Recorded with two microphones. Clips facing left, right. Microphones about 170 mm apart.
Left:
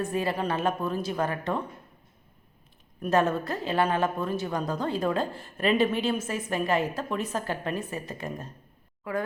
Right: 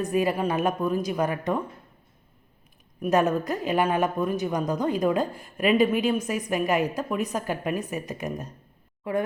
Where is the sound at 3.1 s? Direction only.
15° right (ahead or behind).